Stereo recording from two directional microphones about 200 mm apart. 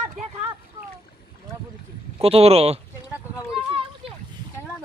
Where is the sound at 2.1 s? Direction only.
30° right (ahead or behind).